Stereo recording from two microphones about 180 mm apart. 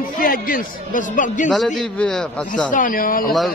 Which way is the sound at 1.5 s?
5° left (ahead or behind).